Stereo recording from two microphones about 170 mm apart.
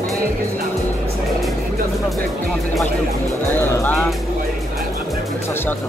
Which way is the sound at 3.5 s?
15° left (ahead or behind).